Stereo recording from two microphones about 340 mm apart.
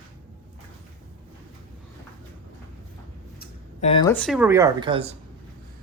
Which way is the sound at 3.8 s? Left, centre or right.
Centre.